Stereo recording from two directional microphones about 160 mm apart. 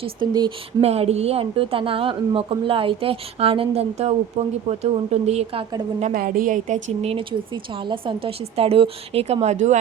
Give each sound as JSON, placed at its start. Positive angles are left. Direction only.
{"t": 0.0, "sound": "a woman's voice", "side_deg": -30}
{"t": 0.9, "sound": "a woman's voice", "side_deg": -40}
{"t": 6.0, "sound": "a woman's voice", "side_deg": -60}